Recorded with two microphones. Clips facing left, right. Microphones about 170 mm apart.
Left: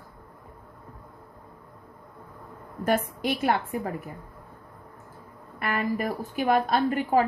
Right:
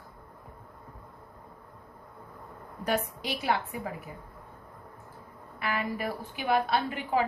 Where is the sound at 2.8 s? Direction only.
50° left (ahead or behind).